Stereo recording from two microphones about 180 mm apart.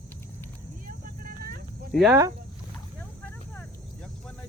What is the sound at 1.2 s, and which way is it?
Vehicle, 50° right (ahead or behind).